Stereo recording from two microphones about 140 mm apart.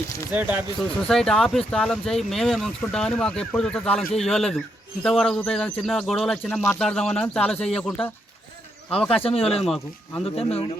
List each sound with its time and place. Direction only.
0.3 s speech: 10° right (ahead or behind)
0.8 s speech: 5° left (ahead or behind)
8.9 s speech: 45° left (ahead or behind)